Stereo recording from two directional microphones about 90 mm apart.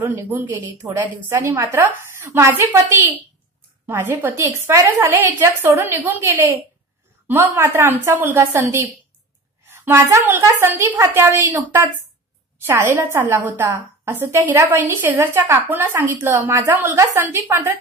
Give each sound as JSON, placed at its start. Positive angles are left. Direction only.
{"t": 0.0, "sound": "a woman's voice", "side_deg": -25}
{"t": 0.5, "sound": "a woman's voice", "side_deg": -35}
{"t": 7.2, "sound": "a woman's voice", "side_deg": -30}